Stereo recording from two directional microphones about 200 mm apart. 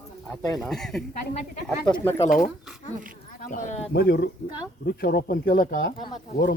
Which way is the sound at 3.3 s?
40° left (ahead or behind).